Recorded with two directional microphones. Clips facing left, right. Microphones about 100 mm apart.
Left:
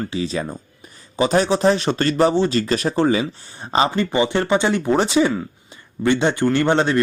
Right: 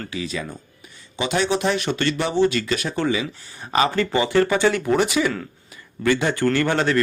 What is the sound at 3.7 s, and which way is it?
Speech, 25° left (ahead or behind).